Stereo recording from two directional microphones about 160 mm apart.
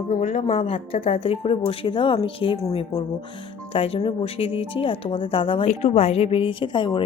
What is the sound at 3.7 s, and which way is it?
A woman's voice, 40° left (ahead or behind).